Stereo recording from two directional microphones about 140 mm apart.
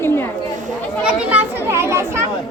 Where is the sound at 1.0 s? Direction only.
10° right (ahead or behind).